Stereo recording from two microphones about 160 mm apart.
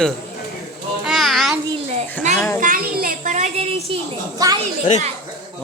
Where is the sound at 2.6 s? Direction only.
60° right (ahead or behind); by 3.9 s 35° right (ahead or behind).